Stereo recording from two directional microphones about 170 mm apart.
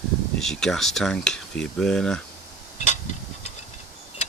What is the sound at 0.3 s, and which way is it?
Speech, 5° left (ahead or behind).